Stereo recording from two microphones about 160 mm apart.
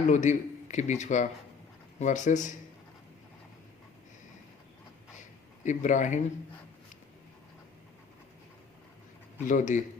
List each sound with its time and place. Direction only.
0.1 s a man's voice: 50° left (ahead or behind)
5.6 s a man's voice: 50° left (ahead or behind)
9.5 s a man's voice: 50° left (ahead or behind)